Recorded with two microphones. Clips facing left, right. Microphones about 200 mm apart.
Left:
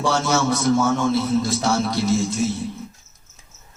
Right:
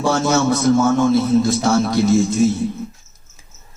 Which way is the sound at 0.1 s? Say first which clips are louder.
Right 6 dB; 50° right (ahead or behind).